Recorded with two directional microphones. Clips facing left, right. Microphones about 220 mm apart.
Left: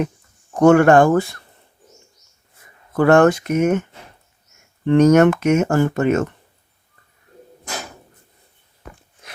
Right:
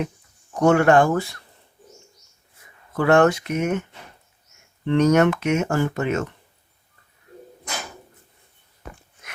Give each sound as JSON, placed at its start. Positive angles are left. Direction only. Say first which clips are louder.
{"t": 0.6, "sound": "speech", "louder": "left 5 dB", "side_deg": 50}
{"t": 2.9, "sound": "speech", "louder": "left 4 dB", "side_deg": 45}
{"t": 4.9, "sound": "speech", "louder": "left 5 dB", "side_deg": 45}